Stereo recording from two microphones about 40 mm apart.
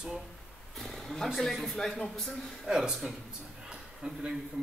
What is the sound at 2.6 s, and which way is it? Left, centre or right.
Speech, centre.